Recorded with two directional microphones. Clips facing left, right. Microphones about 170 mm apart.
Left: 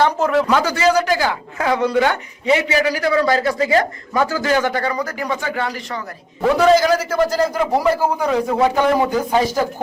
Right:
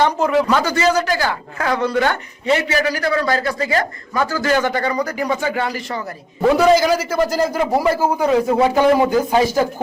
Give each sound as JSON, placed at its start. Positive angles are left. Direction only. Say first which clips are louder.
{"t": 0.0, "sound": "a man's voice", "louder": "even", "side_deg": 5}
{"t": 4.5, "sound": "a man's voice", "louder": "right 2 dB", "side_deg": 5}